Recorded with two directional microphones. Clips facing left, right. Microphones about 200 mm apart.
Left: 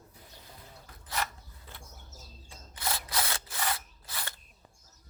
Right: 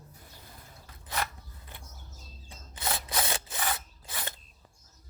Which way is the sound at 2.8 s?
20° right (ahead or behind).